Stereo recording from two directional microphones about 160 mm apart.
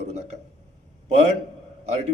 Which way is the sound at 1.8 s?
45° right (ahead or behind).